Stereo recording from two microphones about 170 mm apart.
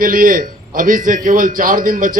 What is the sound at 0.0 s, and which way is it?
A man's voice, 55° right (ahead or behind).